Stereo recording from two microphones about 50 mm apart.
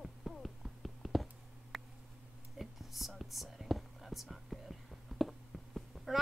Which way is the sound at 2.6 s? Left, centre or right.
Centre.